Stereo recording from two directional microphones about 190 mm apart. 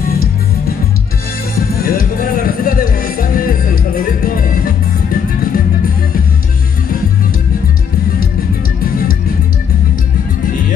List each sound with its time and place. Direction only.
0.0 s music: 50° left (ahead or behind)